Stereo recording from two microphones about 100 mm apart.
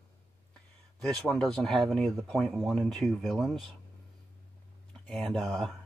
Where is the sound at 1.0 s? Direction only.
5° left (ahead or behind).